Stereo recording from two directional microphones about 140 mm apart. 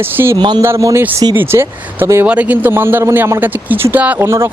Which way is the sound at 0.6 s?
20° right (ahead or behind).